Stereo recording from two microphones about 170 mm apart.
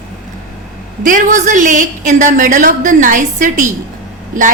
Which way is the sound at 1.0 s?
50° right (ahead or behind).